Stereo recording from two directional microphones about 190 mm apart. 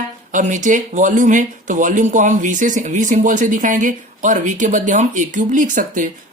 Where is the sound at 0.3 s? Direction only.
40° right (ahead or behind).